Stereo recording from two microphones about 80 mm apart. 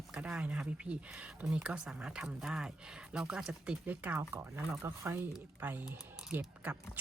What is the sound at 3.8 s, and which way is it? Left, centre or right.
Speech, right.